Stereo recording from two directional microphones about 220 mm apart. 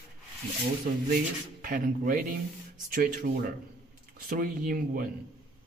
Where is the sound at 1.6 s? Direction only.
40° right (ahead or behind).